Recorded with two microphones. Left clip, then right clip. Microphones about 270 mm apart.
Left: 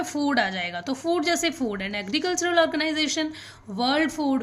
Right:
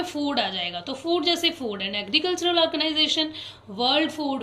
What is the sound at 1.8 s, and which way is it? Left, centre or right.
Speech, left.